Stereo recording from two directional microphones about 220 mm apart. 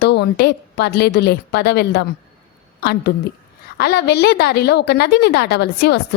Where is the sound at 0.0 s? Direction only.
50° left (ahead or behind).